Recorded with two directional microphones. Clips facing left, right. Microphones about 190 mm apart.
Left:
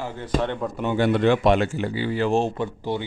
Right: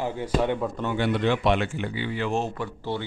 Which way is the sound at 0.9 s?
45° left (ahead or behind).